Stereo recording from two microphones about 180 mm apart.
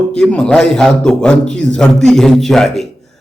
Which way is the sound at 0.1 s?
5° left (ahead or behind).